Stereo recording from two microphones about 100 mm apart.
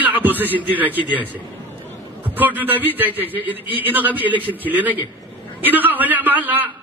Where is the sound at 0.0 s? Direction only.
15° right (ahead or behind).